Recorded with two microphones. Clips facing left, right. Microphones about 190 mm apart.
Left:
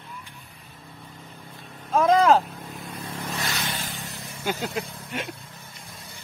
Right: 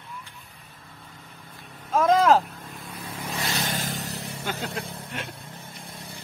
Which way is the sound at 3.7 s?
40° right (ahead or behind).